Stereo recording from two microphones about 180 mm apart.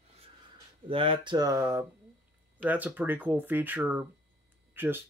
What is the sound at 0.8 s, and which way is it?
Speech, 30° right (ahead or behind).